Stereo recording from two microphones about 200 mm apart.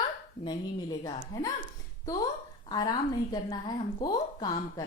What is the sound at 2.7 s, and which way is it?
A woman's voice, 20° left (ahead or behind).